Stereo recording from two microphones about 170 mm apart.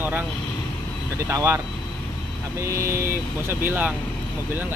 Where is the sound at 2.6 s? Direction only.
15° right (ahead or behind).